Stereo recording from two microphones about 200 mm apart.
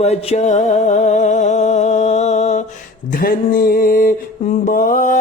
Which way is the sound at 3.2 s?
45° left (ahead or behind).